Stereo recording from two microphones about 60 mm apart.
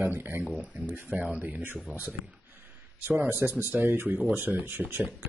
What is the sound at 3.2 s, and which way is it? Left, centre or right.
Speech, right.